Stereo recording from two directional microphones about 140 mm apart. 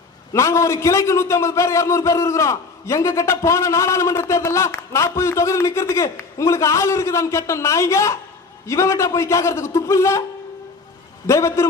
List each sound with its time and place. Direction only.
0.3 s a man's voice: 20° left (ahead or behind)
11.3 s a man's voice: 20° left (ahead or behind)